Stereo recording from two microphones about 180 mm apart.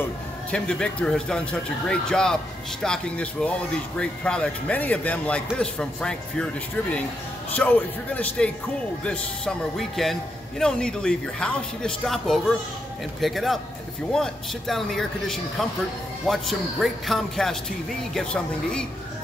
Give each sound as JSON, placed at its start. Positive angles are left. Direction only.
{"t": 0.5, "sound": "a man's voice", "side_deg": 5}